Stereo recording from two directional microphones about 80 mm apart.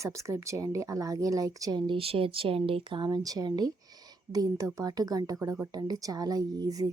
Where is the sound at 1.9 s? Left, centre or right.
Right.